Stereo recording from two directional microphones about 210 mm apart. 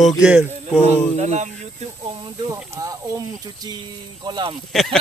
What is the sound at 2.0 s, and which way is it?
Speech, 20° right (ahead or behind).